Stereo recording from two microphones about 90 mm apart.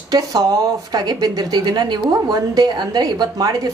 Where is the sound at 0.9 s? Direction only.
50° right (ahead or behind).